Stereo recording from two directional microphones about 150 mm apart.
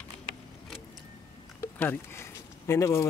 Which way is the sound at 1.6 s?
15° left (ahead or behind).